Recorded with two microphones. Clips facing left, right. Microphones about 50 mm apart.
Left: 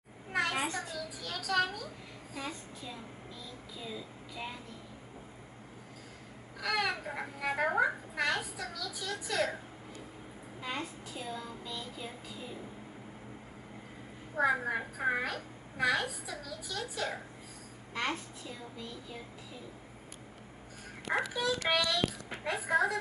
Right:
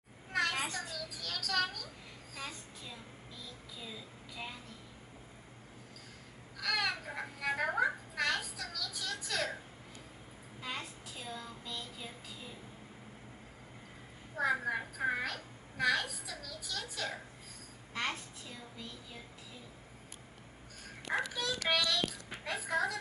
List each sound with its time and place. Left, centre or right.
0.3 s children playing: centre
2.3 s a child's voice: centre
6.6 s a child's voice: centre
10.6 s a child's voice: centre
14.4 s a child's voice: centre
21.1 s a child's voice: centre